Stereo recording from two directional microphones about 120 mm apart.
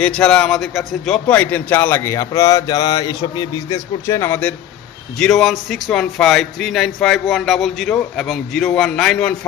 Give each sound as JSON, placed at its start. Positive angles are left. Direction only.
{"t": 0.0, "sound": "a man's voice", "side_deg": 5}
{"t": 3.7, "sound": "speech", "side_deg": 25}
{"t": 5.2, "sound": "speech", "side_deg": 5}